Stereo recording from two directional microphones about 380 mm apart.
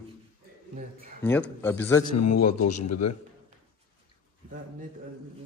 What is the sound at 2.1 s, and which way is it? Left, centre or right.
A man's voice, left.